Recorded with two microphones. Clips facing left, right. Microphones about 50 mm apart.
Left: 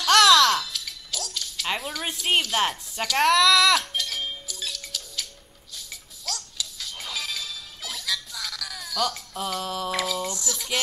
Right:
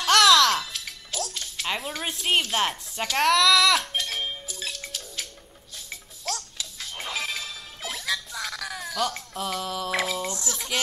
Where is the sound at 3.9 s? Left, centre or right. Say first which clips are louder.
Right 1 dB; right.